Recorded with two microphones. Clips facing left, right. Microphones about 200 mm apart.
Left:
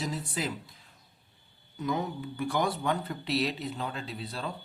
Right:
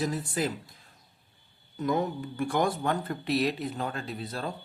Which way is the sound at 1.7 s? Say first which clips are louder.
Right 4 dB; 50° right (ahead or behind).